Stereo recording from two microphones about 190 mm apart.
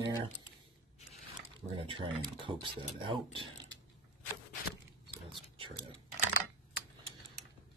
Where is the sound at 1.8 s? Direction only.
25° right (ahead or behind).